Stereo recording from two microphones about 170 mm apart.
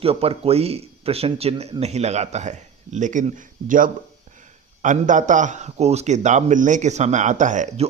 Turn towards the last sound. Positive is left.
turn(degrees=-45)  # may be behind; listen again after turning